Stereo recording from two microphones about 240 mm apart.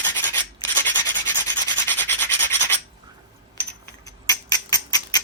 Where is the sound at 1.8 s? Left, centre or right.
Centre.